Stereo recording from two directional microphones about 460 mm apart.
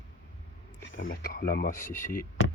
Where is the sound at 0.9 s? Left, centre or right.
Left.